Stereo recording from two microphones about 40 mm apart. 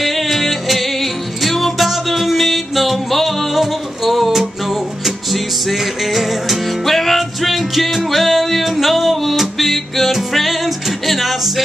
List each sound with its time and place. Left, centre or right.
0.0 s music: centre